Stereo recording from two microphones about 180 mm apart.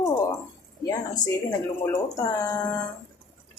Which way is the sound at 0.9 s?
20° left (ahead or behind).